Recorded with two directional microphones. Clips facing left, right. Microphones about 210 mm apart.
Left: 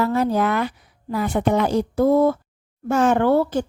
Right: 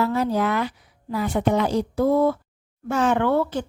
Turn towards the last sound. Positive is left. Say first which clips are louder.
# left 3 dB
turn(degrees=40)  # may be behind; listen again after turning